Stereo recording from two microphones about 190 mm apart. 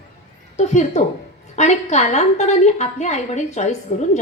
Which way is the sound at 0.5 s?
35° left (ahead or behind).